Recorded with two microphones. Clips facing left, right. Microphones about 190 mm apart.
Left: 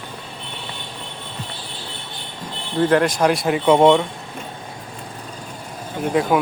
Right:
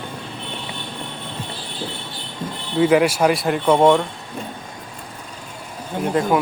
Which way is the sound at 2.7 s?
5° right (ahead or behind).